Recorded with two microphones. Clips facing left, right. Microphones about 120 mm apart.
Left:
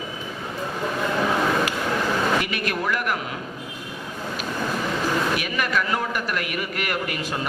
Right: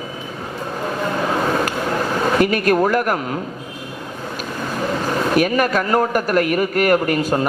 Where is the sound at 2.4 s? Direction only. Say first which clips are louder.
Right 11 dB; 45° right (ahead or behind).